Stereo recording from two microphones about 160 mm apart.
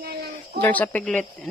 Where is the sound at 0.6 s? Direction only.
10° left (ahead or behind).